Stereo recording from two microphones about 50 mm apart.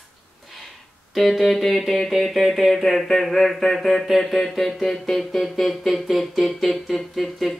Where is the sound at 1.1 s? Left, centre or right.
Centre.